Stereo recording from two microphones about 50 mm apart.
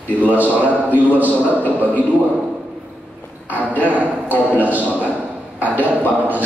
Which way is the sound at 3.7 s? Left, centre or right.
Right.